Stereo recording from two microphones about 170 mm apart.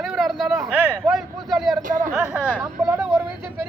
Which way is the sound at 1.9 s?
50° right (ahead or behind).